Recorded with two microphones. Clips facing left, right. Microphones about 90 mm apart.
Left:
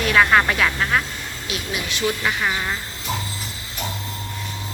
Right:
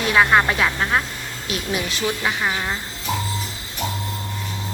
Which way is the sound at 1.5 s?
40° right (ahead or behind).